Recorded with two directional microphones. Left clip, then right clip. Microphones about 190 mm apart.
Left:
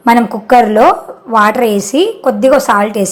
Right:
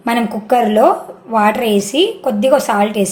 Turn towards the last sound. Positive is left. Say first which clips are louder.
# left 4 dB
turn(degrees=20)  # may be behind; listen again after turning